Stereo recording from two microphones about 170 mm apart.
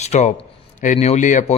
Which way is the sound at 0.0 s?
40° left (ahead or behind).